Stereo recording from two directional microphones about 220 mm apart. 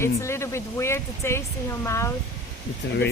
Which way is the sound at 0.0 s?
10° left (ahead or behind).